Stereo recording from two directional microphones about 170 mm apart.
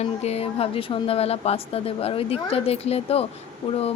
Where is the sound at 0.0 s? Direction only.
40° left (ahead or behind).